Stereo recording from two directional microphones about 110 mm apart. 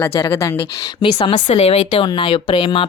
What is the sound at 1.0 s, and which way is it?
Speech, 50° left (ahead or behind).